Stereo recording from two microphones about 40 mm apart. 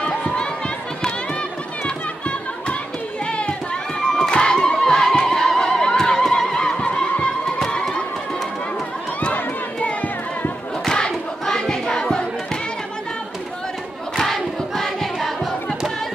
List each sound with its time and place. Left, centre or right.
0.0 s run: left
3.3 s a sound: left
4.0 s a sound: centre
5.3 s neigh: centre
7.7 s run: centre
10.9 s choir: centre
14.1 s choir: centre